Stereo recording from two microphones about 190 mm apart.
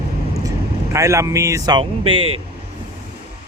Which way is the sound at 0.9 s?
15° right (ahead or behind).